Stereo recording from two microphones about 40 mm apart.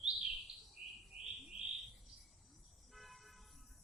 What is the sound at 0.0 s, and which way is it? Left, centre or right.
Bird, centre.